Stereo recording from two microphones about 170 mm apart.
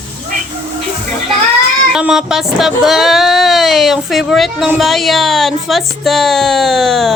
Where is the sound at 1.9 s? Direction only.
5° right (ahead or behind).